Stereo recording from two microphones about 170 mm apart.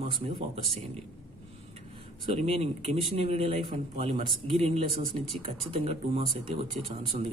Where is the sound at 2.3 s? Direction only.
35° right (ahead or behind).